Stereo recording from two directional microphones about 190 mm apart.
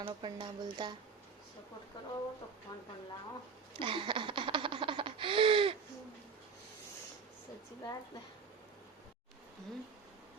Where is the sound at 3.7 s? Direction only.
25° right (ahead or behind).